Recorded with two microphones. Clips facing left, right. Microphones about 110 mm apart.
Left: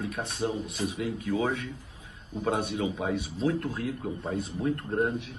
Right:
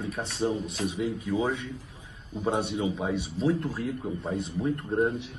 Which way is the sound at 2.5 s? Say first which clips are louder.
Right 1 dB; 25° right (ahead or behind).